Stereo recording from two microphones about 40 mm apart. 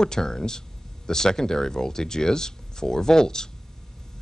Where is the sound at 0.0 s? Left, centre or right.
Centre.